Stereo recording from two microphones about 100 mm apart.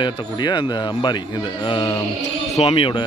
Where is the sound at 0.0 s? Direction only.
50° left (ahead or behind).